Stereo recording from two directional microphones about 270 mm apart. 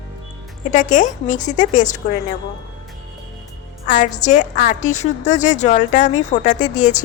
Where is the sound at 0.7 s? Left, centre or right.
Left.